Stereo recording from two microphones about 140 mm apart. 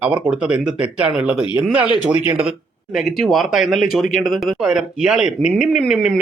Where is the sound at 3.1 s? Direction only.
Centre (ahead or behind).